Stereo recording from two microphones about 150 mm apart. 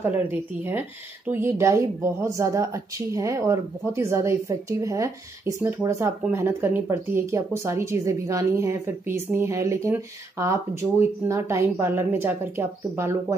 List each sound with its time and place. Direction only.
0.0 s speech: 10° right (ahead or behind)
11.0 s speech: 20° right (ahead or behind)